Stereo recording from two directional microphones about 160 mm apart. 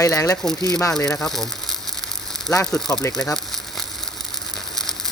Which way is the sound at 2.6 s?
5° left (ahead or behind).